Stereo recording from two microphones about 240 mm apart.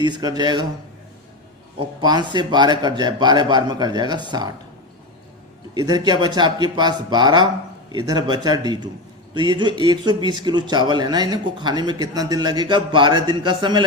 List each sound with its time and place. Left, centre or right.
0.0 s a man's voice: centre
2.0 s a man's voice: centre
5.7 s a man's voice: centre